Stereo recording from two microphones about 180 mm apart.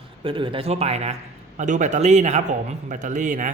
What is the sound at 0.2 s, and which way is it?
A man's voice, 30° right (ahead or behind).